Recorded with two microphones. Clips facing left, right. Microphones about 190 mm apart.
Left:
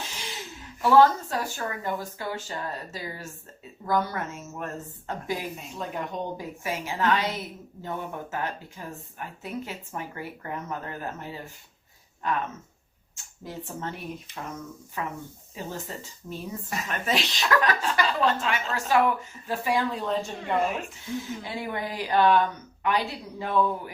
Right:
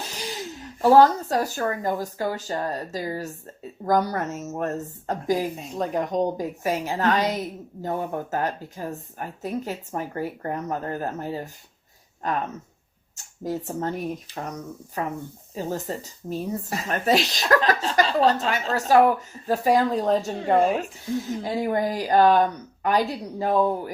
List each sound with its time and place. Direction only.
0.0 s speech: 40° right (ahead or behind)
13.4 s speech: 40° right (ahead or behind)